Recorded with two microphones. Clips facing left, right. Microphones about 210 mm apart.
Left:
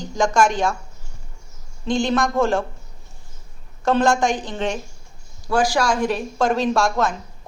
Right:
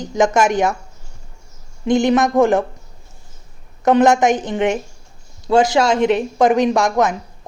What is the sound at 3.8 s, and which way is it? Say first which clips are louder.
A woman's voice: right 5 dB; 20° right (ahead or behind).